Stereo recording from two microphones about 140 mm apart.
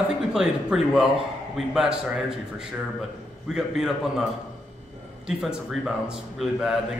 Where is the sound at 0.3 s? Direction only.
5° right (ahead or behind).